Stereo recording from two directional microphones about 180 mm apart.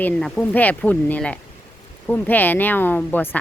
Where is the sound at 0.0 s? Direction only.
5° left (ahead or behind).